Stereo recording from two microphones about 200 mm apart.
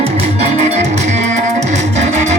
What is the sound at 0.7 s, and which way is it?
Music, 35° right (ahead or behind).